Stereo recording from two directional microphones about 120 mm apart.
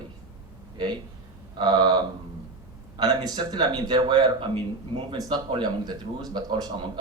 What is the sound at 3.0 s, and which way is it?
A man's voice, 35° right (ahead or behind).